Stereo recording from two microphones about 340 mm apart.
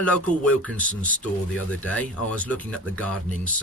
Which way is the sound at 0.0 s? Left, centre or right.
Centre.